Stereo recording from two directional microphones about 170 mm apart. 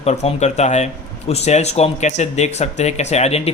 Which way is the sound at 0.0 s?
40° left (ahead or behind).